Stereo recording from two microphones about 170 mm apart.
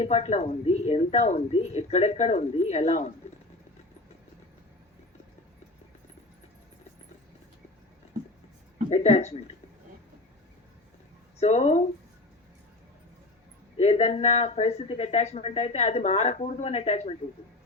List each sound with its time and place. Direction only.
0.0 s speech: 40° left (ahead or behind)
8.9 s speech: 40° left (ahead or behind)
11.3 s speech: 40° left (ahead or behind)
13.7 s speech: 35° left (ahead or behind)